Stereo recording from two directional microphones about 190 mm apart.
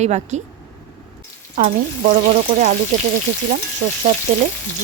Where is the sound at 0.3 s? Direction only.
40° right (ahead or behind).